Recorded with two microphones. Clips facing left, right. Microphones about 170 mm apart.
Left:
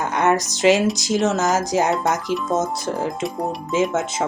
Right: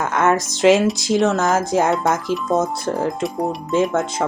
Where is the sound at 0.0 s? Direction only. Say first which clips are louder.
Right 1 dB; centre (ahead or behind).